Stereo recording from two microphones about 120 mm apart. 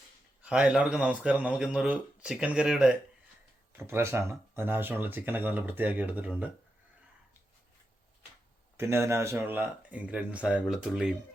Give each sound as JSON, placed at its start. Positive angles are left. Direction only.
{"t": 0.4, "sound": "speech", "side_deg": -5}
{"t": 3.7, "sound": "speech", "side_deg": -20}
{"t": 8.8, "sound": "speech", "side_deg": -20}